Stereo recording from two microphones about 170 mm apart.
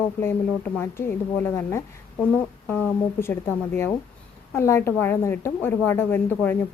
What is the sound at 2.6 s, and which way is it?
Speech, 10° left (ahead or behind).